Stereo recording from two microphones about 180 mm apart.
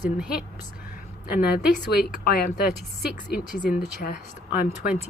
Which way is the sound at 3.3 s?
50° left (ahead or behind).